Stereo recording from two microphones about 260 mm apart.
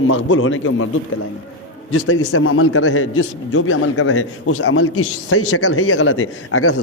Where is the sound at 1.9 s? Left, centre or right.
Left.